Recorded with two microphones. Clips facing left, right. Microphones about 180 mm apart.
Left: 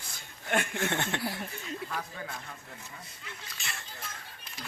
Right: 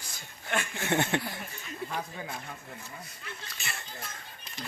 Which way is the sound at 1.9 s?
20° right (ahead or behind).